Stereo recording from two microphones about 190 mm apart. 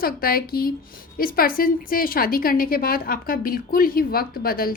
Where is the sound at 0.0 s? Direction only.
50° left (ahead or behind).